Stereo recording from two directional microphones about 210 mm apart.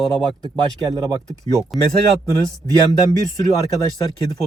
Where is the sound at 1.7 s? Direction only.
Centre (ahead or behind).